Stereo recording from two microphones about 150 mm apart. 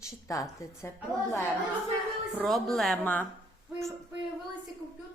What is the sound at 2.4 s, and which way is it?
Speech, centre (ahead or behind).